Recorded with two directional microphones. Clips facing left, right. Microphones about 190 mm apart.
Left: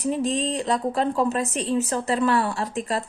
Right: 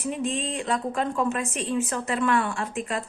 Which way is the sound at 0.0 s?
35° left (ahead or behind).